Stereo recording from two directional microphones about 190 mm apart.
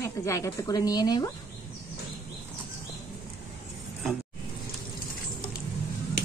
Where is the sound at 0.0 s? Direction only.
15° left (ahead or behind).